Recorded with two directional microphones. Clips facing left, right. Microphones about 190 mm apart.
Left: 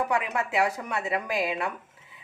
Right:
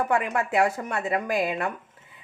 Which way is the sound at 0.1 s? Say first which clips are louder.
Right 3 dB; 50° right (ahead or behind).